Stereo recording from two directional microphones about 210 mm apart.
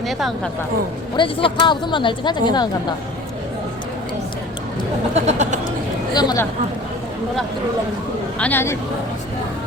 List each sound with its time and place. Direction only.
0.0 s speech: centre (ahead or behind)
1.1 s speech: 25° left (ahead or behind)
5.1 s speech: 35° right (ahead or behind)
6.1 s speech: 15° left (ahead or behind)
8.4 s speech: 10° left (ahead or behind)